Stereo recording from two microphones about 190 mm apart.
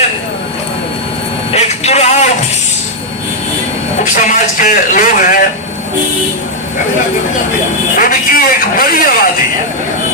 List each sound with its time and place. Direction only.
1.5 s vehicle: 35° left (ahead or behind)
4.0 s speech: 40° left (ahead or behind)
7.9 s speech: 45° left (ahead or behind)